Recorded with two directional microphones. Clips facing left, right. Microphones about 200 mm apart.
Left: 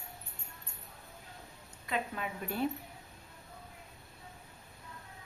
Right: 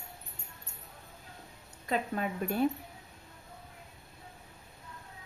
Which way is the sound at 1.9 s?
40° right (ahead or behind).